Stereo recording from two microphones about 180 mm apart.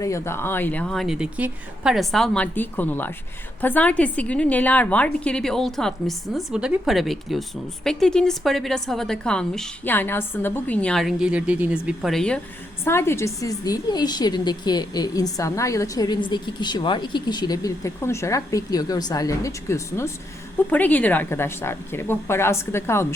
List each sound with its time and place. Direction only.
0.0 s a woman's voice: 15° left (ahead or behind)
12.8 s a woman's voice: 15° left (ahead or behind)